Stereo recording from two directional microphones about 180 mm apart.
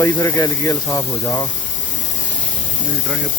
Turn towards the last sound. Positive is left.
turn(degrees=10)  # may be behind; listen again after turning